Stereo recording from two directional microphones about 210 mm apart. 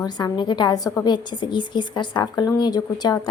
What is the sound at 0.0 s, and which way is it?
A woman's voice, 20° left (ahead or behind).